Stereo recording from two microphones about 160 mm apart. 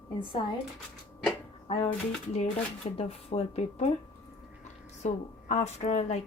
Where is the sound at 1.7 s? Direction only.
35° left (ahead or behind).